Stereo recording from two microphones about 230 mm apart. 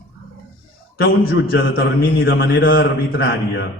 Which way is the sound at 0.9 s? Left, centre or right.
Left.